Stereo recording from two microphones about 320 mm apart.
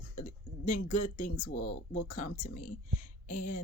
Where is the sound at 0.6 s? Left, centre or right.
Left.